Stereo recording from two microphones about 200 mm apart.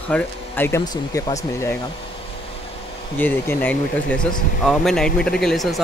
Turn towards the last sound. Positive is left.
turn(degrees=0)  # may be behind; listen again after turning